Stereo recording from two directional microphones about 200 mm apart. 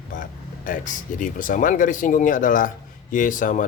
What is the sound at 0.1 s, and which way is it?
Speech, 45° left (ahead or behind).